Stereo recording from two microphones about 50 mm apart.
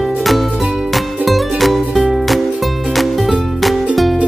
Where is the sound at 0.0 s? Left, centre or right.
Centre.